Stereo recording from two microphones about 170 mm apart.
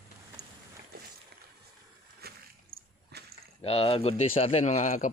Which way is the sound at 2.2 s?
70° right (ahead or behind).